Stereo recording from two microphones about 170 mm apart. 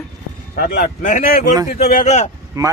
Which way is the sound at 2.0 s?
40° left (ahead or behind).